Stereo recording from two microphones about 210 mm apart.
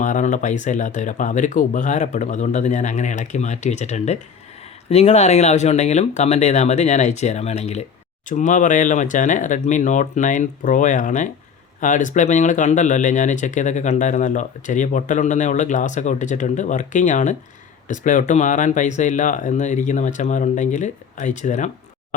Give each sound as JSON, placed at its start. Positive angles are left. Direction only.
{"t": 0.0, "sound": "speech", "side_deg": 35}